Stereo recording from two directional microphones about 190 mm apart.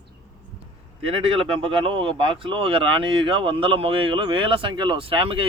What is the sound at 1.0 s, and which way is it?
Speech, 30° right (ahead or behind).